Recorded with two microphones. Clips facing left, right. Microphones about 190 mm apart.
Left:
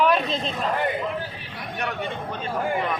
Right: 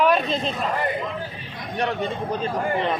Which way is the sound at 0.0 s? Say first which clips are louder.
Right 1 dB; centre (ahead or behind).